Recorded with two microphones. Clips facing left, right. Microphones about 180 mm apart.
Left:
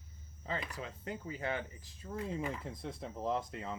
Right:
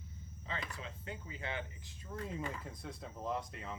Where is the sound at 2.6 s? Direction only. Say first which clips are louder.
Left 4 dB; 25° left (ahead or behind).